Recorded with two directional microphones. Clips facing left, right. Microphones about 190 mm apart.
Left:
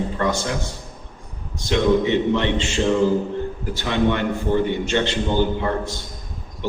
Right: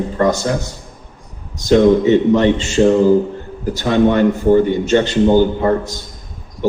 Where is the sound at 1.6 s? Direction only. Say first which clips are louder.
Right 7 dB; 40° right (ahead or behind).